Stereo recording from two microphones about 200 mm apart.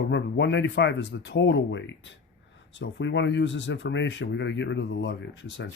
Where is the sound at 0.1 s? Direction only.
65° left (ahead or behind).